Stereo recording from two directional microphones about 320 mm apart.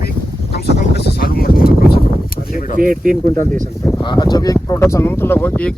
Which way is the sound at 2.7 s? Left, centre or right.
Right.